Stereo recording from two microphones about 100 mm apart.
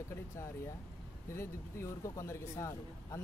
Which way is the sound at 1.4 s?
30° left (ahead or behind).